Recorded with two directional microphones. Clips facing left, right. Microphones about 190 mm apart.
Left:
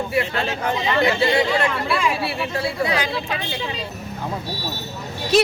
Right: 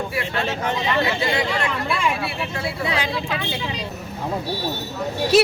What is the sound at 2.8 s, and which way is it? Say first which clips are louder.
Speech: left 2 dB; 25° right (ahead or behind).